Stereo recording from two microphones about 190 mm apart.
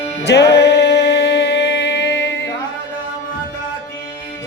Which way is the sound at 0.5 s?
60° left (ahead or behind).